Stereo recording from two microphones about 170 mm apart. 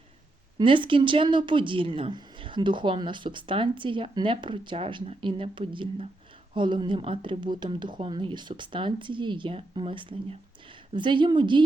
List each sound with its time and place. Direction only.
0.6 s speech: 30° right (ahead or behind)